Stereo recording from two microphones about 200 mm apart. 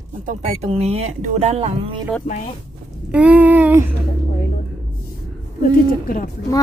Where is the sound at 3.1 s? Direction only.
5° right (ahead or behind).